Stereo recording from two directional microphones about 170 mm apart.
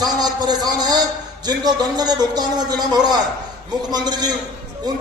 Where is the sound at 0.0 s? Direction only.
25° right (ahead or behind).